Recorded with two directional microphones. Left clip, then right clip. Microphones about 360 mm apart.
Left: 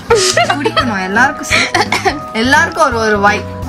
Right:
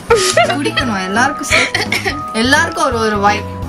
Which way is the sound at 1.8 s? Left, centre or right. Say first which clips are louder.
Left 4 dB; centre.